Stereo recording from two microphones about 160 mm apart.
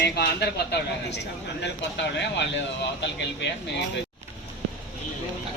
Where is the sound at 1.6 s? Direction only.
90° left.